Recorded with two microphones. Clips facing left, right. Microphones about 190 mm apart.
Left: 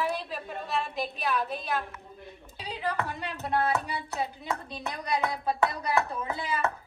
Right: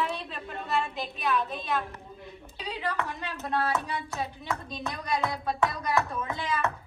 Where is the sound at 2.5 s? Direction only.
30° left (ahead or behind).